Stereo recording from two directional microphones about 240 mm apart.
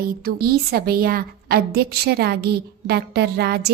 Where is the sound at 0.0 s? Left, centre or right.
Right.